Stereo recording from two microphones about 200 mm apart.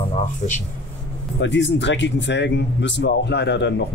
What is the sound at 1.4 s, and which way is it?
A man's voice, 65° left (ahead or behind).